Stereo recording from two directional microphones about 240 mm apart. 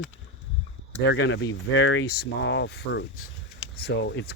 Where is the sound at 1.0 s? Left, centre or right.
Left.